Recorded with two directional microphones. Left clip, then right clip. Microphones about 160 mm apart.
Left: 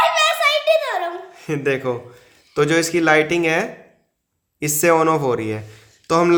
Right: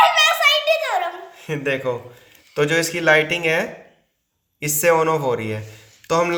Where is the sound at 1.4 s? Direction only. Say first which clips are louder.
Left 2 dB; 80° left.